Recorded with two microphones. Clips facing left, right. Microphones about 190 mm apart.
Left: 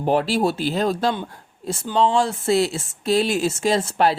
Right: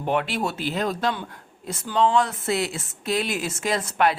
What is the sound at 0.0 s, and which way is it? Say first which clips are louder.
Speech: left 5 dB; 35° left (ahead or behind).